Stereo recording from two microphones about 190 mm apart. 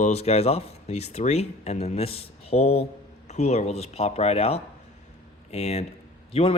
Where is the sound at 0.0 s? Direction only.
35° left (ahead or behind).